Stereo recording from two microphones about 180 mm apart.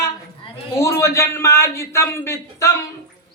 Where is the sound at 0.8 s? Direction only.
15° left (ahead or behind).